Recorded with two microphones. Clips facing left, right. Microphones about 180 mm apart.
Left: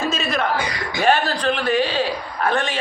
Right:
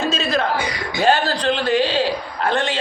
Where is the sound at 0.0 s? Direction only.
30° right (ahead or behind).